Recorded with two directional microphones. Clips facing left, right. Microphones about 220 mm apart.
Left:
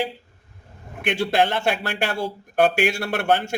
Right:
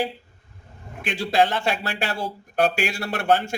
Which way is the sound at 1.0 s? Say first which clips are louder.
Left 1 dB; 60° left (ahead or behind).